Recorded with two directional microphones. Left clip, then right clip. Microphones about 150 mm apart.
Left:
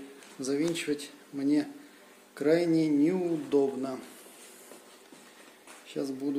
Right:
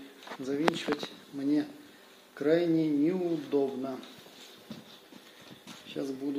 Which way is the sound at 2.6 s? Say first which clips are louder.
Left 2 dB; 30° left (ahead or behind).